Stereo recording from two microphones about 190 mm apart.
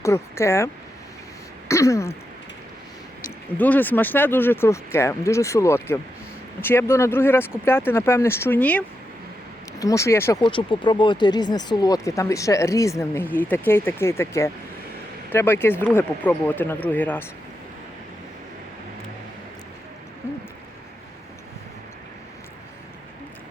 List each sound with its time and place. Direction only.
0.0 s speech: 15° left (ahead or behind)
1.6 s throat clearing: 15° left (ahead or behind)
3.2 s speech: 10° left (ahead or behind)
10.4 s speech: 25° left (ahead or behind); by 17.2 s 10° left (ahead or behind)
20.2 s a sound: 10° left (ahead or behind)